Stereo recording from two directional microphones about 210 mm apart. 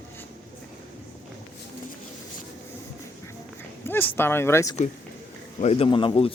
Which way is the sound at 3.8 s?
10° left (ahead or behind).